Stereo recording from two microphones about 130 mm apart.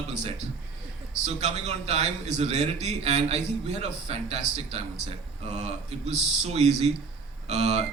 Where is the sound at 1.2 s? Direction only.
55° right (ahead or behind).